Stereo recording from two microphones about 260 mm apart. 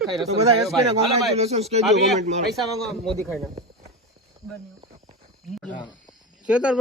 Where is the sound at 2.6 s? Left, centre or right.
Centre.